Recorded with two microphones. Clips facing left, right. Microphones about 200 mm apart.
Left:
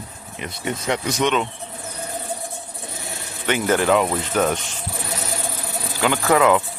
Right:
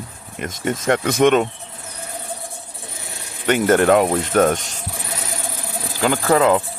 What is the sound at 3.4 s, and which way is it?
Speech, 45° right (ahead or behind).